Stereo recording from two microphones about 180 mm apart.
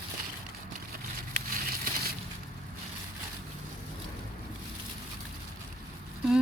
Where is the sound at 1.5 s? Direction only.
55° right (ahead or behind).